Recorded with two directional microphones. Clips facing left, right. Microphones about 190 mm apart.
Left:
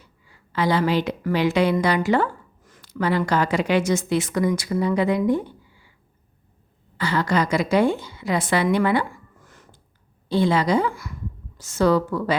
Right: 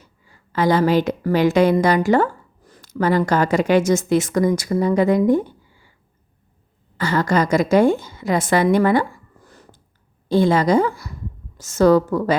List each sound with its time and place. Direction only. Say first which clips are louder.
0.0 s a woman's voice: right 1 dB; 45° right (ahead or behind)
6.9 s a woman's voice: right 3 dB; 45° right (ahead or behind)